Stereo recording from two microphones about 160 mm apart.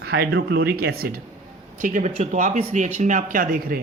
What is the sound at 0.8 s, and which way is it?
Speech, 70° right (ahead or behind).